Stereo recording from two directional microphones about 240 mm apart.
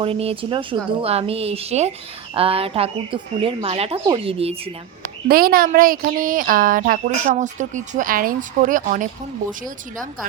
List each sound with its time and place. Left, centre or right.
0.0 s speech: right
5.3 s speech: right